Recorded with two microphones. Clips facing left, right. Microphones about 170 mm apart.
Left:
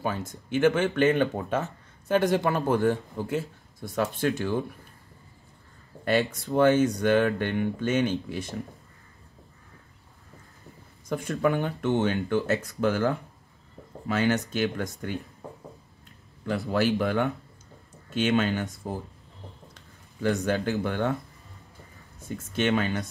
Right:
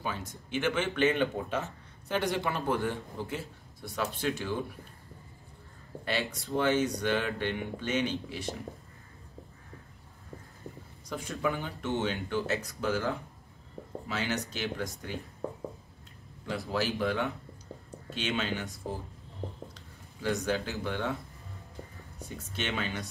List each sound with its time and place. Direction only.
0.0 s speech: 50° left (ahead or behind)
6.0 s speech: 50° left (ahead or behind)
11.1 s speech: 55° left (ahead or behind)
16.4 s speech: 55° left (ahead or behind)
19.7 s speech: 55° left (ahead or behind)
22.6 s speech: 50° left (ahead or behind)